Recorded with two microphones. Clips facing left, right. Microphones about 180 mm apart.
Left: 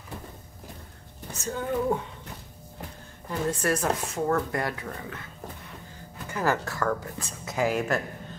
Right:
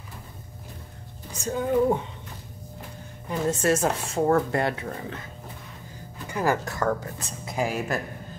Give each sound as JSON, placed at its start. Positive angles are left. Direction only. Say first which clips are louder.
{"t": 1.3, "sound": "a woman's voice", "louder": "right 5 dB", "side_deg": -15}
{"t": 3.3, "sound": "speech", "louder": "right 3 dB", "side_deg": -25}
{"t": 6.3, "sound": "a woman's voice", "louder": "right 2 dB", "side_deg": -15}